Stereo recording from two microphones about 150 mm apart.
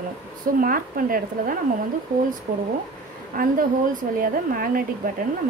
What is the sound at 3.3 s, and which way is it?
A woman's voice, 65° right (ahead or behind).